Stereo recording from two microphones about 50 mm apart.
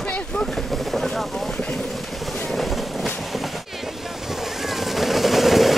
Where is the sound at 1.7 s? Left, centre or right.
Centre.